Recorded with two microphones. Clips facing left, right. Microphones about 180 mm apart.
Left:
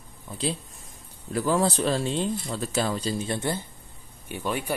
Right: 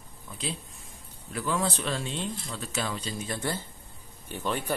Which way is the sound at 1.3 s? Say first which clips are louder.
Left 6 dB; 35° left (ahead or behind).